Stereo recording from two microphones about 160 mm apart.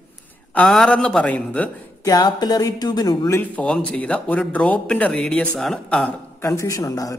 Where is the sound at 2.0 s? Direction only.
25° left (ahead or behind).